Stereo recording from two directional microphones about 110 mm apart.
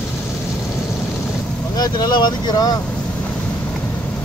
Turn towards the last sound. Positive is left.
turn(degrees=35)  # may be behind; listen again after turning